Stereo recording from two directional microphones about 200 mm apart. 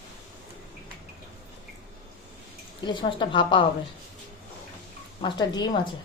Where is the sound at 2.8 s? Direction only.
25° left (ahead or behind).